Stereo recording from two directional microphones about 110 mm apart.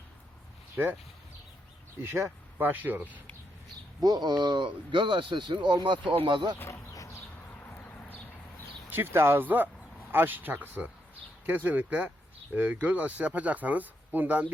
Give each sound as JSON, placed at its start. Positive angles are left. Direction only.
{"t": 0.8, "sound": "speech", "side_deg": -15}
{"t": 2.0, "sound": "speech", "side_deg": -25}
{"t": 4.0, "sound": "speech", "side_deg": -35}
{"t": 6.6, "sound": "speech", "side_deg": 20}
{"t": 6.9, "sound": "a sound", "side_deg": 30}
{"t": 7.6, "sound": "a sound", "side_deg": 15}
{"t": 8.9, "sound": "speech", "side_deg": -20}